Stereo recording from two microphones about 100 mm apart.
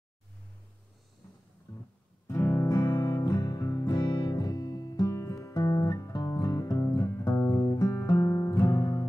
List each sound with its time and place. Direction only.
2.2 s music: 20° left (ahead or behind)
2.7 s music: 40° left (ahead or behind)
7.9 s music: 30° left (ahead or behind)